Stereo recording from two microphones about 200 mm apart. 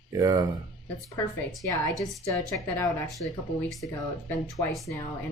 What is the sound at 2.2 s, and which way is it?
Speech, 15° left (ahead or behind).